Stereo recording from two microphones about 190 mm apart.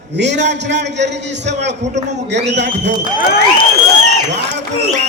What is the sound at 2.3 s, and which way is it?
Speech, 65° right (ahead or behind).